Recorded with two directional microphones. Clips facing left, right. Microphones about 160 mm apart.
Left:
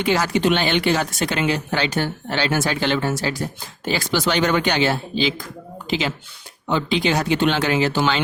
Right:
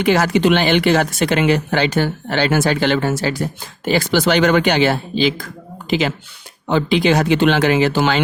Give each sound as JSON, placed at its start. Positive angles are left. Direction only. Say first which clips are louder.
{"t": 0.1, "sound": "speech", "louder": "right 5 dB", "side_deg": -75}
{"t": 5.9, "sound": "speech", "louder": "right 5 dB", "side_deg": -55}